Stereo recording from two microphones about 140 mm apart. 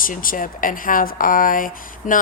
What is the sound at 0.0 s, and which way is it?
Speech, 85° left.